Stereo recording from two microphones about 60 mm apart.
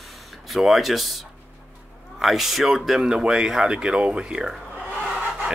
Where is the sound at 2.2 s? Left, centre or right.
Centre.